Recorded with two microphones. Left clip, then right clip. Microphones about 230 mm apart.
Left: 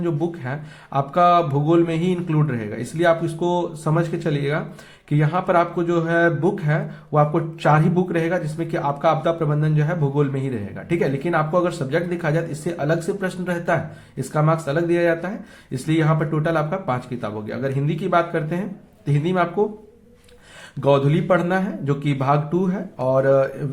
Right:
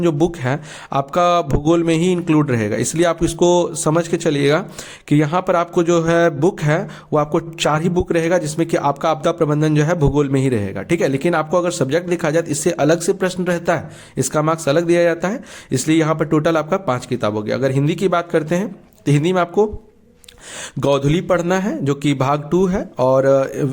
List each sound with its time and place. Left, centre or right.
0.0 s speech: right
20.8 s speech: right